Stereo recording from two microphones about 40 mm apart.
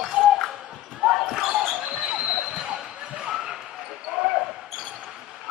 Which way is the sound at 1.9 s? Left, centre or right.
Centre.